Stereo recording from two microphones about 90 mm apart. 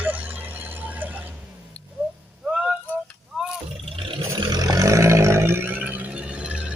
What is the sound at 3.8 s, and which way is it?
Vehicle, 90° right.